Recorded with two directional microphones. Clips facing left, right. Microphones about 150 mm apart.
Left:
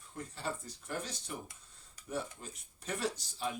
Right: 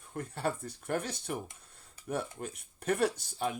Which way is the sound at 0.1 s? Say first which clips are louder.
Right 6 dB; 60° right (ahead or behind).